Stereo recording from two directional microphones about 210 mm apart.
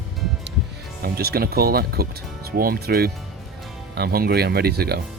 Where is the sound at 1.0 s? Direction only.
45° right (ahead or behind).